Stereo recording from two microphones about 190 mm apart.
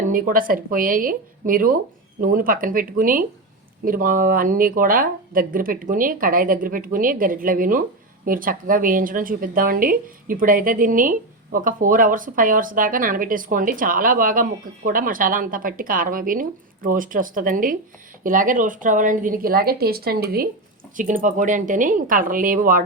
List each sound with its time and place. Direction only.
0.1 s a woman's voice: 45° right (ahead or behind)